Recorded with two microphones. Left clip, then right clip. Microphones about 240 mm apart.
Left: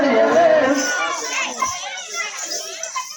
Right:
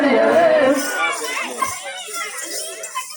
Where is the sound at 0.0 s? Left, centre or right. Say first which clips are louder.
Even; right.